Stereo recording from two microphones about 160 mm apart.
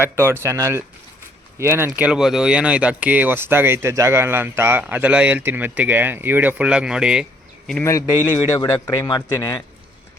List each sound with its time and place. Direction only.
0.0 s speech: 15° right (ahead or behind)
7.9 s a man's voice: 20° left (ahead or behind)